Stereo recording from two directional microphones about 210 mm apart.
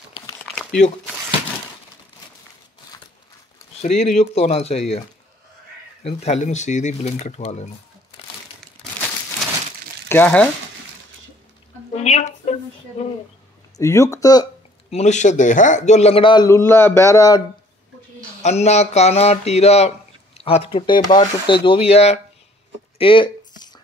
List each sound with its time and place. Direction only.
3.8 s a man's voice: 30° left (ahead or behind)
6.0 s speech: 30° left (ahead or behind)
10.0 s speech: 10° left (ahead or behind)
11.9 s speech: 30° left (ahead or behind)
13.7 s speech: 15° left (ahead or behind)
14.9 s a man's voice: 30° left (ahead or behind); by 17.4 s 15° left (ahead or behind)
18.4 s a man's voice: 30° left (ahead or behind)
22.9 s a sound: 25° left (ahead or behind)